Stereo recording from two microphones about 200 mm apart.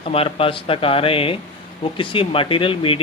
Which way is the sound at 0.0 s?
30° left (ahead or behind).